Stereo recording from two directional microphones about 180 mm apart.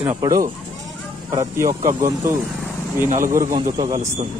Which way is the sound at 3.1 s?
50° right (ahead or behind).